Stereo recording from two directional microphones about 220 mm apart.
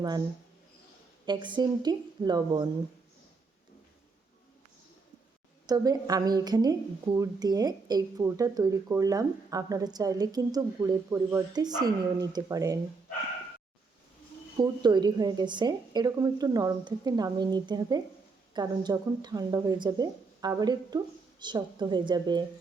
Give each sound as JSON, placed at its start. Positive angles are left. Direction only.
{"t": 1.2, "sound": "a woman's voice", "side_deg": -20}
{"t": 5.6, "sound": "a woman's voice", "side_deg": -15}
{"t": 14.6, "sound": "a woman's voice", "side_deg": -20}